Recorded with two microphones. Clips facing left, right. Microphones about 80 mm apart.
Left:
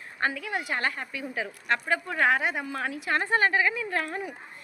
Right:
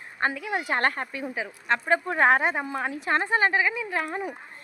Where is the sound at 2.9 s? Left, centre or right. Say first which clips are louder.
Right 3 dB; right.